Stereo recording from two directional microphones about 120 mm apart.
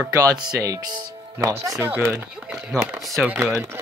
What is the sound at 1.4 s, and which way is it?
Speech, 25° right (ahead or behind).